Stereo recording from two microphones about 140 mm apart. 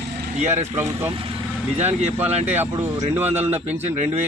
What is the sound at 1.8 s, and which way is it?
Speech, 50° right (ahead or behind).